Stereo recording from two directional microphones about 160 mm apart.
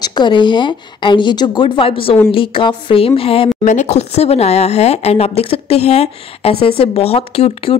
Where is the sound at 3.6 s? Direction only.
45° left (ahead or behind).